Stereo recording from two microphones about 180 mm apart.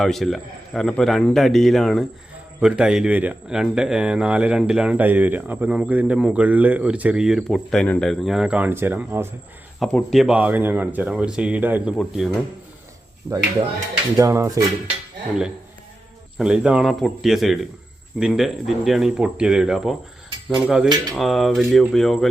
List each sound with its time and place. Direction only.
0.0 s speech: centre (ahead or behind)
9.8 s speech: centre (ahead or behind)
14.2 s speech: 15° right (ahead or behind)
16.4 s speech: 5° right (ahead or behind)